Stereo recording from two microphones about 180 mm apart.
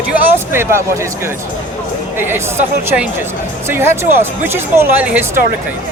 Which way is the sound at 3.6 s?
15° right (ahead or behind).